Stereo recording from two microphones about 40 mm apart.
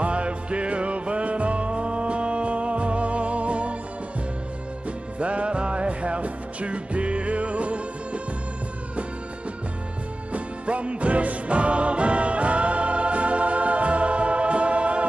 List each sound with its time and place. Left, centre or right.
0.0 s music: right
5.2 s music: right
10.3 s music: right